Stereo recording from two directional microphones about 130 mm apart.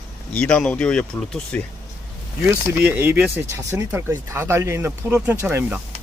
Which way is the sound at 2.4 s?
15° right (ahead or behind).